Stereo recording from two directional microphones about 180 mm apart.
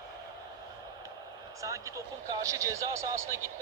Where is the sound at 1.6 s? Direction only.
15° right (ahead or behind).